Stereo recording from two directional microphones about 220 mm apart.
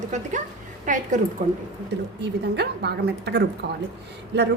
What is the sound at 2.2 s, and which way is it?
A woman's voice, 50° right (ahead or behind).